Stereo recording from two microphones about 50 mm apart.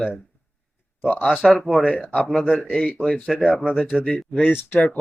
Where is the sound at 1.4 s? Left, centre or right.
Centre.